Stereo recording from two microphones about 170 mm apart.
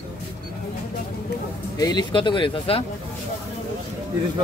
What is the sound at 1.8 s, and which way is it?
Speech, 25° left (ahead or behind).